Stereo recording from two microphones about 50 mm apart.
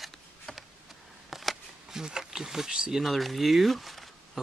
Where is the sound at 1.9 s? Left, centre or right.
Centre.